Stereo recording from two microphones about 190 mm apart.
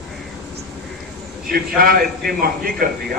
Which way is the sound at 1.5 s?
50° right (ahead or behind).